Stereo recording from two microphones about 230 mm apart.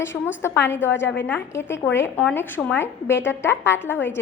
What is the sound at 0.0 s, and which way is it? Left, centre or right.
A woman's voice, centre.